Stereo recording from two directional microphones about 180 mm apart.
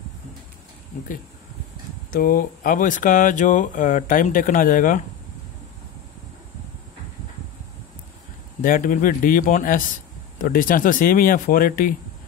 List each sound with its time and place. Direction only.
2.0 s speech: 55° left (ahead or behind)
8.5 s speech: 50° left (ahead or behind)